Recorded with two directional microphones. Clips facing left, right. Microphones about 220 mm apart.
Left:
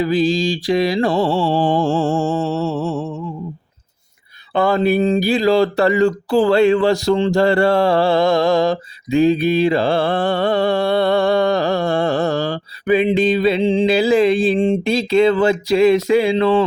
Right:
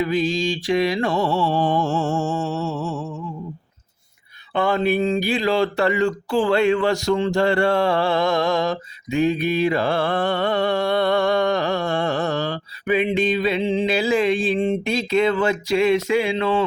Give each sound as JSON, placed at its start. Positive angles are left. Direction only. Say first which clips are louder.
{"t": 0.0, "sound": "speech", "louder": "left 4 dB", "side_deg": 35}
{"t": 4.5, "sound": "speech", "louder": "left 4 dB", "side_deg": 35}